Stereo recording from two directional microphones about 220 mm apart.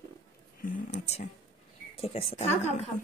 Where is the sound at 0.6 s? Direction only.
35° left (ahead or behind).